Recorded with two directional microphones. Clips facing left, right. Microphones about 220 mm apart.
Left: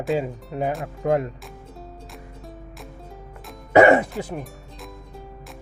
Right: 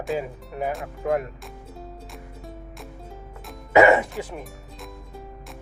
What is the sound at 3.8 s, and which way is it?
Music, 30° left (ahead or behind).